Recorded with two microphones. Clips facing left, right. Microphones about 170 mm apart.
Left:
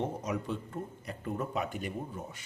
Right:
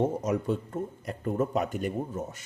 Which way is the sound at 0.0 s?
45° right (ahead or behind).